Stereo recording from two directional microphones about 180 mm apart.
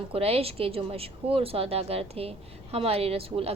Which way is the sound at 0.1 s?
35° right (ahead or behind).